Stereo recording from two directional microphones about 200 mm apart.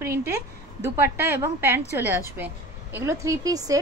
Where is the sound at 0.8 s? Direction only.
10° right (ahead or behind).